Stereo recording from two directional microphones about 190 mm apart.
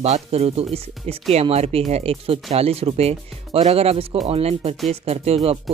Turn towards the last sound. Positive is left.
turn(degrees=-30)  # may be behind; listen again after turning